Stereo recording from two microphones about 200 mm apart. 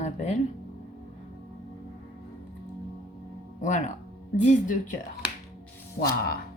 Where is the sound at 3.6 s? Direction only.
40° left (ahead or behind).